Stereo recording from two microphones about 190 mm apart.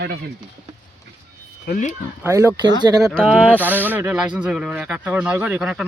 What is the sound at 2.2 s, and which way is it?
Speech, 15° right (ahead or behind).